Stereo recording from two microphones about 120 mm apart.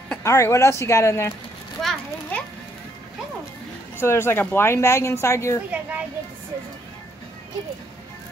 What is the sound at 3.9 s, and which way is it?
Speech, 20° left (ahead or behind).